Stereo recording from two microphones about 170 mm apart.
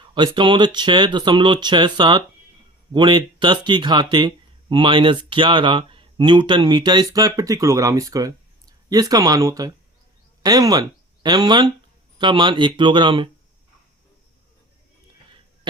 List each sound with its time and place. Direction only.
0.1 s speech: 30° right (ahead or behind)